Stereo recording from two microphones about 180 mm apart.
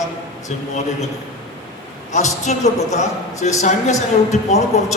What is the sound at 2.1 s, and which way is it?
A man's voice, 40° left (ahead or behind).